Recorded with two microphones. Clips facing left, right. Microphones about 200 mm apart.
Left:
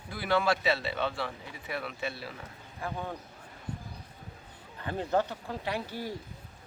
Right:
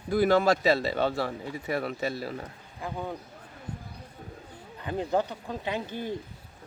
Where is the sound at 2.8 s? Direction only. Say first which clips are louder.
Right 2 dB; 15° right (ahead or behind).